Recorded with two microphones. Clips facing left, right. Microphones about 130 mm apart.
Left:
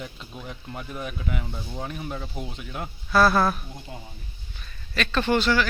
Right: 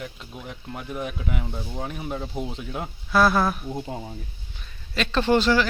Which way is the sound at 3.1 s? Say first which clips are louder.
Even; 10° right (ahead or behind).